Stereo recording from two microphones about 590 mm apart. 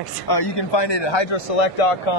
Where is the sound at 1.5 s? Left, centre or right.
Left.